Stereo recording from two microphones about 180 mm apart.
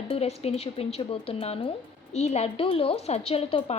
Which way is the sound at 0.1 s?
35° left (ahead or behind).